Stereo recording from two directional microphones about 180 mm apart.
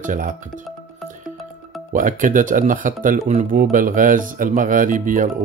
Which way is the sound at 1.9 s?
45° right (ahead or behind).